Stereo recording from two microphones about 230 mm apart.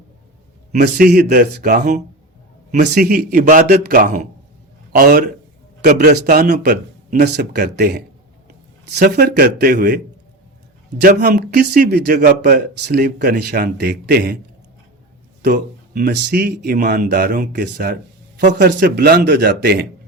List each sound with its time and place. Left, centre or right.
0.8 s a man's voice: right
15.4 s a man's voice: right